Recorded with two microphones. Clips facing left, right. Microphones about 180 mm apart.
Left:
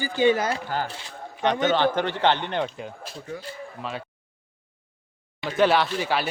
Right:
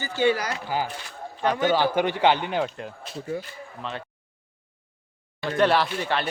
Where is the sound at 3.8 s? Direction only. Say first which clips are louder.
Even; 5° left (ahead or behind).